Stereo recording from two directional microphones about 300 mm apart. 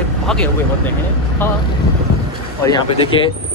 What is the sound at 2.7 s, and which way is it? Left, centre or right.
Speech, centre.